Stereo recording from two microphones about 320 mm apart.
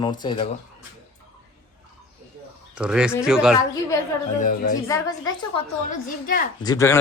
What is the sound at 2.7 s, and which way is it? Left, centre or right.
Speech, centre.